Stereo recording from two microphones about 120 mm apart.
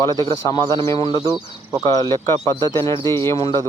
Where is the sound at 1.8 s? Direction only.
30° left (ahead or behind).